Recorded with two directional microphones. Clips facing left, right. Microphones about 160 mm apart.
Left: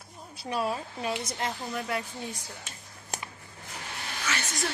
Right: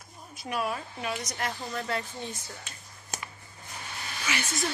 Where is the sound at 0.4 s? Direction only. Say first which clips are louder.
Left 1 dB; 30° left (ahead or behind); by 2.0 s 10° left (ahead or behind).